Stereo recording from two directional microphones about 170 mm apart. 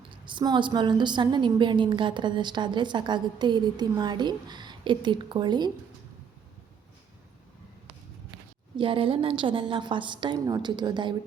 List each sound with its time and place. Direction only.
0.1 s a woman's voice: 30° right (ahead or behind)
8.7 s a woman's voice: 30° right (ahead or behind)